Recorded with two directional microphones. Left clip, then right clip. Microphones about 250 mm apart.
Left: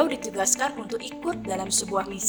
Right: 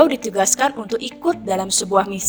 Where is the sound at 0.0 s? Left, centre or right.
Right.